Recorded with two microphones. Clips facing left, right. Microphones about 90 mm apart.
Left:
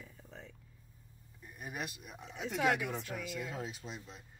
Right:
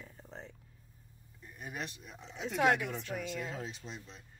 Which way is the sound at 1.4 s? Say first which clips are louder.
Even; 5° left (ahead or behind).